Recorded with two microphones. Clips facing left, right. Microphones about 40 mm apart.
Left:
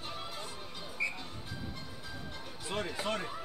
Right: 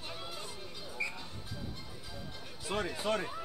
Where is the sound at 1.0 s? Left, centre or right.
Centre.